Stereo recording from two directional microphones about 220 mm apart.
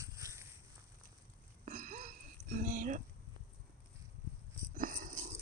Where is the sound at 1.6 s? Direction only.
35° right (ahead or behind).